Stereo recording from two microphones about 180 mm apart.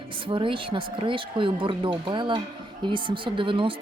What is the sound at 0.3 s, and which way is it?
A woman's voice, 30° right (ahead or behind).